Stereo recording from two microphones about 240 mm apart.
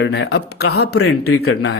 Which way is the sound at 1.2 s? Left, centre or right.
Left.